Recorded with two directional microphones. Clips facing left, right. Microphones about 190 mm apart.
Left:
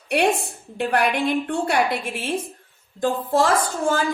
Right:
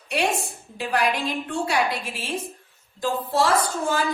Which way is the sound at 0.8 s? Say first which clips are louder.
Left 3 dB; 60° left (ahead or behind).